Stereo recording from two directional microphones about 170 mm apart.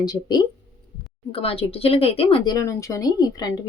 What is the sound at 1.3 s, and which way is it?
Speech, 35° left (ahead or behind).